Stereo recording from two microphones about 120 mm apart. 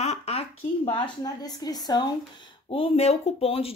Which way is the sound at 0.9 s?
35° left (ahead or behind).